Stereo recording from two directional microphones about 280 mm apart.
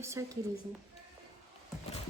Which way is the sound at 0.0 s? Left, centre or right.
Centre.